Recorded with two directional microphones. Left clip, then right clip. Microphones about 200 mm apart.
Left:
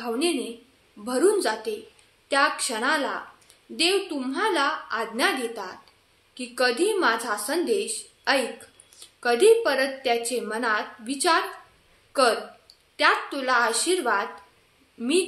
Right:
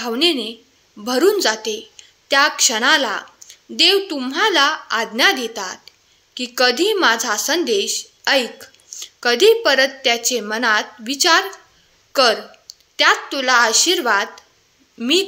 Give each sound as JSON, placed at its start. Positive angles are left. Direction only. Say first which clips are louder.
{"t": 0.0, "sound": "a woman's voice", "louder": "right 8 dB", "side_deg": -45}